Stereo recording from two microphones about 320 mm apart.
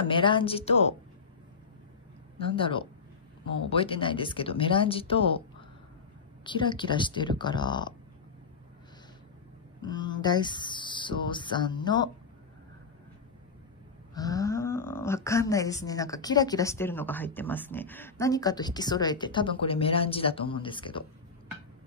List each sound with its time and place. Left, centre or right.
0.0 s speech: centre
2.3 s speech: centre
6.4 s speech: centre
9.8 s speech: centre
14.1 s speech: centre